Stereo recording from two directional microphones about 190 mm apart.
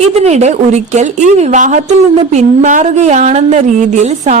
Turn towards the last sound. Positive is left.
turn(degrees=-40)  # may be behind; listen again after turning